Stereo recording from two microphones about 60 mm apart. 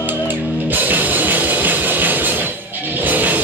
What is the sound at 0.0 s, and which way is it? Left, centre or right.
Music, right.